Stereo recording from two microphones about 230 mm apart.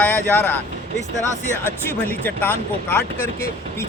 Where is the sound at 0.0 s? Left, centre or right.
Centre.